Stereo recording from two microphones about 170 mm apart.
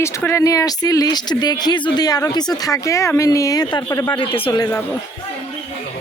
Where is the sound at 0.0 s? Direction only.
15° left (ahead or behind).